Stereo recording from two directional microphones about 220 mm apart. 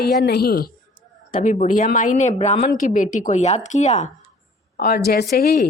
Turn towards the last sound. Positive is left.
turn(degrees=45)  # may be behind; listen again after turning